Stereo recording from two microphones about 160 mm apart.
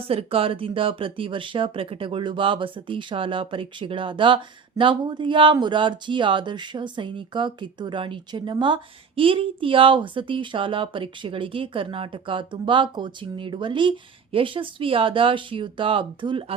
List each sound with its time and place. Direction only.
0.1 s speech: 35° right (ahead or behind)